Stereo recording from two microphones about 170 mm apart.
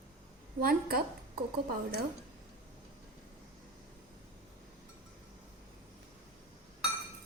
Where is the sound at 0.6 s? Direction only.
60° right (ahead or behind).